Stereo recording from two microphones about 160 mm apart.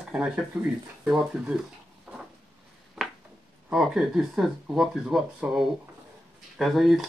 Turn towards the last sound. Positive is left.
turn(degrees=0)  # may be behind; listen again after turning